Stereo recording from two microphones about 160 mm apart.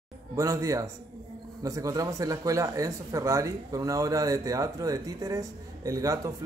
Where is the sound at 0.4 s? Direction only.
20° right (ahead or behind).